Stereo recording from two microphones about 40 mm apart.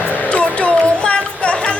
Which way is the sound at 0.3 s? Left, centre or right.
Left.